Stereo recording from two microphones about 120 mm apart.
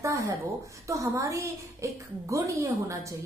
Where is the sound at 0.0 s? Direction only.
25° right (ahead or behind).